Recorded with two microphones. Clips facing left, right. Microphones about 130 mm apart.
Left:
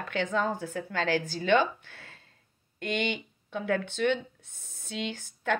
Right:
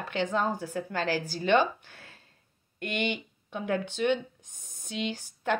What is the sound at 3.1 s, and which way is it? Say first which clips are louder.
Speech: even; 15° right (ahead or behind).